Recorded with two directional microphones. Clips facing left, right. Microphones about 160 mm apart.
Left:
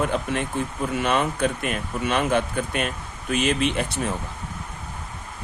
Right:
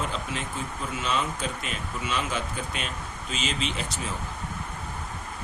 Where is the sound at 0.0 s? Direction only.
55° left (ahead or behind).